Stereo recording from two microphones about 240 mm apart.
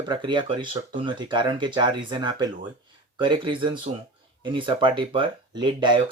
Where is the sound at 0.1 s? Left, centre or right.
Centre.